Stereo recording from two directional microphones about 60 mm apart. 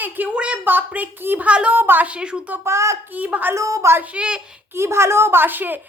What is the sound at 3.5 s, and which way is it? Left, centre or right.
Speech, right.